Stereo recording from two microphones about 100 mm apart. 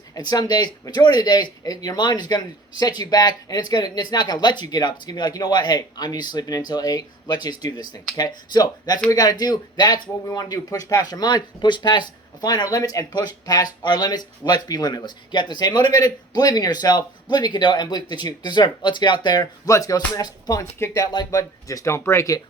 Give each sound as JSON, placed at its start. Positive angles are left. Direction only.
{"t": 0.1, "sound": "speech", "side_deg": 45}
{"t": 19.6, "sound": "speech", "side_deg": 35}